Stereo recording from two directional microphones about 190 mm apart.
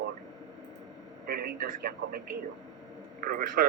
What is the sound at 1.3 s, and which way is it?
A man's voice, 50° right (ahead or behind).